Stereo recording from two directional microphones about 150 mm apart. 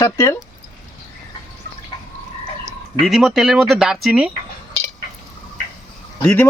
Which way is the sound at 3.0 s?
Centre (ahead or behind).